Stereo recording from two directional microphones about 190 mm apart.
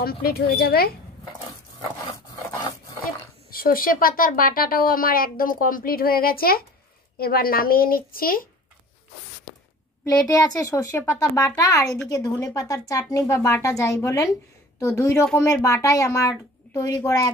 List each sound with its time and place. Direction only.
0.0 s a woman's voice: 55° left (ahead or behind)
3.4 s a woman's voice: 50° left (ahead or behind)
10.0 s speech: 20° left (ahead or behind)